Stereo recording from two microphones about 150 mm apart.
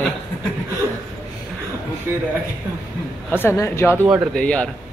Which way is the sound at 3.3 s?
15° left (ahead or behind).